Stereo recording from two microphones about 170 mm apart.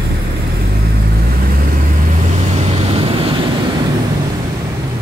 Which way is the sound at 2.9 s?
30° right (ahead or behind).